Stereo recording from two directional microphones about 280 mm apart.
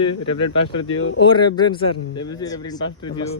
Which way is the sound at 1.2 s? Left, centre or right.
Centre.